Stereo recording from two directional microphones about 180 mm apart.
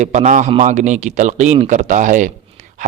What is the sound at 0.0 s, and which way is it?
Speech, 40° right (ahead or behind).